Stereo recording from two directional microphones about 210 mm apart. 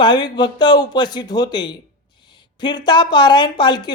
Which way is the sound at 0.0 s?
20° left (ahead or behind).